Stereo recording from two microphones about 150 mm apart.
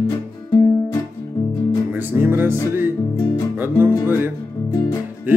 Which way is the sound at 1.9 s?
10° right (ahead or behind).